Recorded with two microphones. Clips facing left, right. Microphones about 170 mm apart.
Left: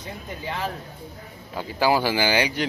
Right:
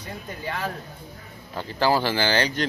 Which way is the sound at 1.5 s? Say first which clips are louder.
Left 1 dB; 10° left (ahead or behind).